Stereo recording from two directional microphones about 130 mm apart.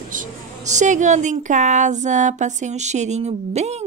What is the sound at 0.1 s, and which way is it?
A woman's voice, 80° right.